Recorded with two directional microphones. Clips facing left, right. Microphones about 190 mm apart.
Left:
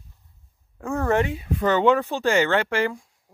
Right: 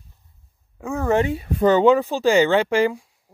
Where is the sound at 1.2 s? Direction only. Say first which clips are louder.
Right 3 dB; 40° right (ahead or behind).